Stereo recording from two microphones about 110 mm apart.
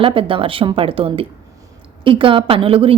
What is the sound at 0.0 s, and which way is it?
A woman's voice, 55° right (ahead or behind).